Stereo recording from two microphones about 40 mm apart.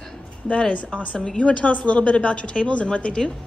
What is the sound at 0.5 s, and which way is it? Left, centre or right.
A woman's voice, left.